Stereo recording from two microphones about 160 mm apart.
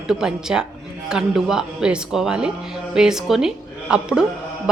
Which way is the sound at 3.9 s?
5° right (ahead or behind).